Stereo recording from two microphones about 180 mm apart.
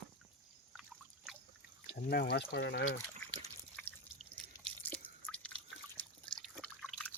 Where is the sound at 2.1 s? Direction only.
65° left (ahead or behind).